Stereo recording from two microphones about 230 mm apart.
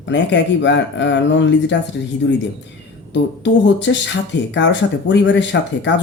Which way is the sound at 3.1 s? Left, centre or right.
Left.